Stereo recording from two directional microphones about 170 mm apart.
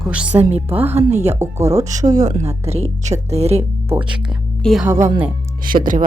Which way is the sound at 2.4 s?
40° right (ahead or behind).